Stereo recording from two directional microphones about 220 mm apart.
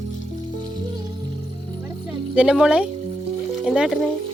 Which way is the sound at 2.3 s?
5° right (ahead or behind).